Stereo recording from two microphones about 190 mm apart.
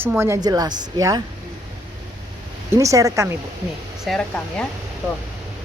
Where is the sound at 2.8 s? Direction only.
15° right (ahead or behind).